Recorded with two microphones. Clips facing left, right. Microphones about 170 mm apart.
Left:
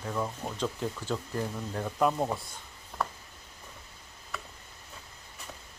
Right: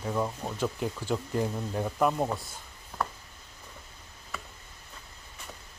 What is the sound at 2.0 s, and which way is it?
Speech, 5° right (ahead or behind).